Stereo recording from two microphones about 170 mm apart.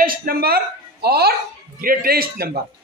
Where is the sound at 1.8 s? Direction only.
60° right (ahead or behind).